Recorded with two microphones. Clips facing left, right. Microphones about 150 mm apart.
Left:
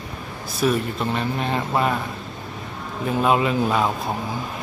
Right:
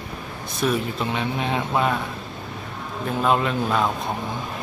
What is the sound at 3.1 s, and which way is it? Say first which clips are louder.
Speech: left 2 dB; 5° left (ahead or behind).